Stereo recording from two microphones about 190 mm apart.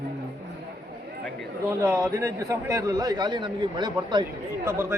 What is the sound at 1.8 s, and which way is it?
A man's voice, 15° right (ahead or behind).